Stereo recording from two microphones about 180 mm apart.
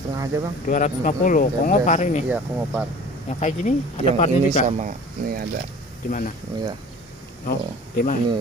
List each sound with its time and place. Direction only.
0.1 s a sound: 20° right (ahead or behind)
0.7 s speech: 45° left (ahead or behind)
2.2 s speech: 10° right (ahead or behind)
3.3 s speech: 40° left (ahead or behind)
4.6 s speech: 45° right (ahead or behind)
6.0 s speech: 50° left (ahead or behind)
7.4 s speech: 55° left (ahead or behind)